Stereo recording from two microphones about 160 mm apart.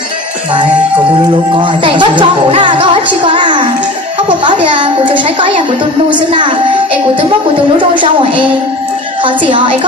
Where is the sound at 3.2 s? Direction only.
30° right (ahead or behind).